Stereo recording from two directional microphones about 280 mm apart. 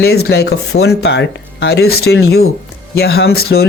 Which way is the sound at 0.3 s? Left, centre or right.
Left.